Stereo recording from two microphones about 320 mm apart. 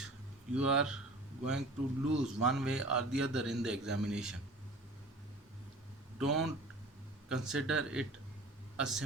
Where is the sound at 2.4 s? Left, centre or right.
Centre.